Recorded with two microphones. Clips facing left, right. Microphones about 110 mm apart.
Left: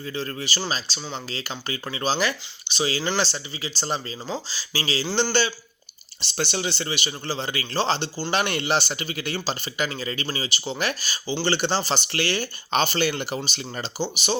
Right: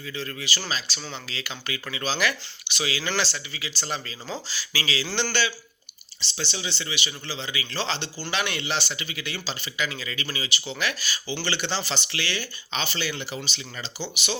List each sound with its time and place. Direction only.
0.0 s speech: 35° left (ahead or behind)
6.2 s speech: 50° left (ahead or behind)